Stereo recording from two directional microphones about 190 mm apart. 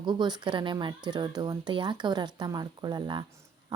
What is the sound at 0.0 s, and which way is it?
Speech, 20° right (ahead or behind).